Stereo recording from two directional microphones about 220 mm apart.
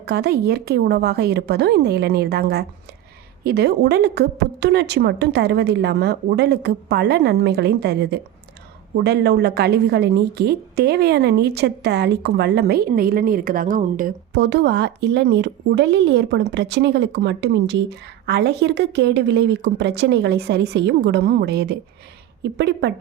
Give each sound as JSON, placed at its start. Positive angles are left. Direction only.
{"t": 0.0, "sound": "a woman's voice", "side_deg": -45}
{"t": 14.3, "sound": "a woman's voice", "side_deg": -55}